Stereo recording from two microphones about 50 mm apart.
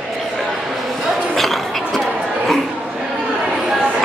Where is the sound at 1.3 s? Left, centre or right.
Centre.